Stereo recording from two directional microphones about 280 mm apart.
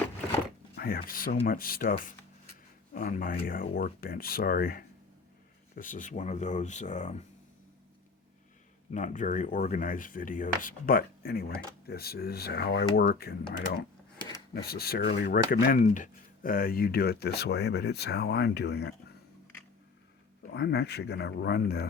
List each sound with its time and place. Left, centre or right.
0.8 s speech: left
5.7 s a sound: left
8.9 s a sound: left
13.0 s speech: left
14.5 s speech: left
20.5 s speech: left